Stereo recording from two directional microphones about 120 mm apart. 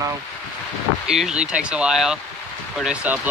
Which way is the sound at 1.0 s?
5° right (ahead or behind).